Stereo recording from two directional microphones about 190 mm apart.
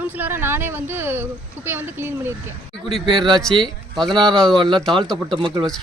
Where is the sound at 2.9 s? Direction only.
25° right (ahead or behind).